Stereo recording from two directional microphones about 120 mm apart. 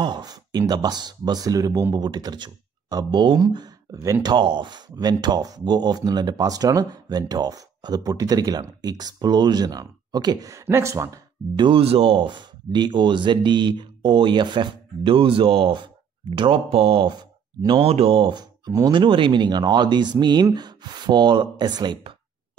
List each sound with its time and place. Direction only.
0.0 s speech: 35° right (ahead or behind)
11.5 s speech: 40° right (ahead or behind)
11.8 s speech: 55° right (ahead or behind)
17.1 s speech: 35° right (ahead or behind); by 18.2 s 55° right (ahead or behind)
18.2 s speech: 35° right (ahead or behind)